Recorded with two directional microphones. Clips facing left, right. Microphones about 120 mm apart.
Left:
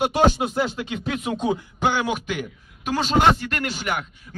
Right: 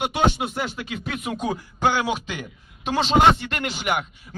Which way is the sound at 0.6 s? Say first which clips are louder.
Left 3 dB; 30° left (ahead or behind).